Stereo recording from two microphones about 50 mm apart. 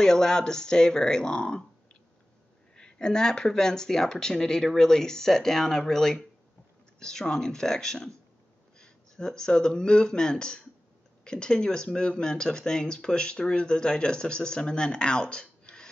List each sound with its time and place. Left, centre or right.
0.0 s speech: centre
2.7 s speech: centre